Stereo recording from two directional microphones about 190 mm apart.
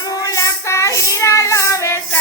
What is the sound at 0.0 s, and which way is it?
Child singing, 20° left (ahead or behind).